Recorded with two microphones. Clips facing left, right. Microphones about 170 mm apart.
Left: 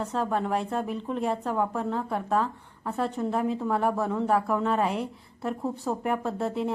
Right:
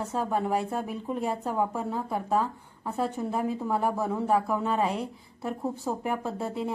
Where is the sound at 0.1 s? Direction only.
5° right (ahead or behind).